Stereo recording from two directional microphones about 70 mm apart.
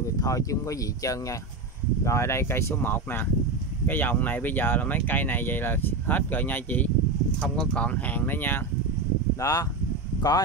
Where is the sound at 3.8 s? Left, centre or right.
Left.